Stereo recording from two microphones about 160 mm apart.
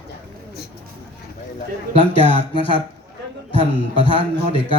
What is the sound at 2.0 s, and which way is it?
Speech, 35° left (ahead or behind).